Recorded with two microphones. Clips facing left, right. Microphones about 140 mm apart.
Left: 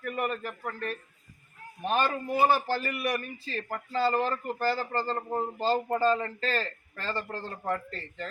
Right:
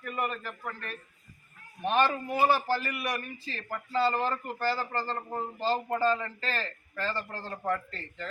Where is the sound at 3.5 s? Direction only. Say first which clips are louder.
Left 5 dB; 40° left (ahead or behind).